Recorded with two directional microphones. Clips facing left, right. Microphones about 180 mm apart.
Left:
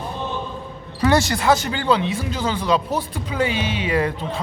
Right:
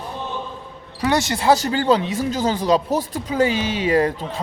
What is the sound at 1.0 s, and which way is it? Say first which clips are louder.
Speech: even; 20° right (ahead or behind).